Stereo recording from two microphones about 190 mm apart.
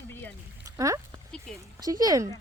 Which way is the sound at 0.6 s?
15° right (ahead or behind).